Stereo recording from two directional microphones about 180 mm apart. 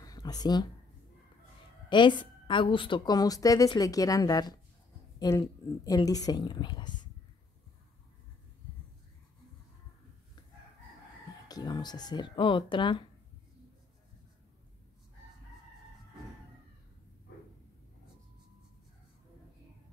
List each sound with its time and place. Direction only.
0.0 s a sound: 20° left (ahead or behind)
1.9 s a woman's voice: 25° left (ahead or behind)
11.4 s speech: 20° left (ahead or behind)